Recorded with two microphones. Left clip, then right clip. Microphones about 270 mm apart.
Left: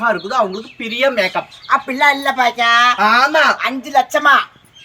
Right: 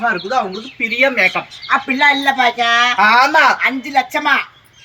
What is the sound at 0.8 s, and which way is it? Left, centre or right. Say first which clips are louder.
Speech: right 2 dB; centre.